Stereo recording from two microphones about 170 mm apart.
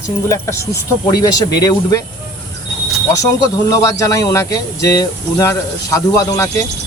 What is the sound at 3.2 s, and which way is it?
Speech, 20° left (ahead or behind).